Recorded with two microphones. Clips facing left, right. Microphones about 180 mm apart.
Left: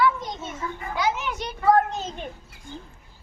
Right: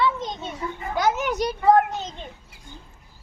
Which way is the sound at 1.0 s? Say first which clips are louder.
Right 5 dB; 45° right (ahead or behind).